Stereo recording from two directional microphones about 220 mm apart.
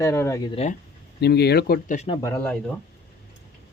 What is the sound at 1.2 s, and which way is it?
Speech, 45° left (ahead or behind).